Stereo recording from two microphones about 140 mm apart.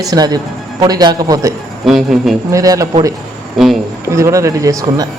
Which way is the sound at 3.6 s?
Centre (ahead or behind).